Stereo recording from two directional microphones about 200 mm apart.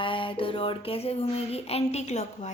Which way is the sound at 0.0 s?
25° left (ahead or behind).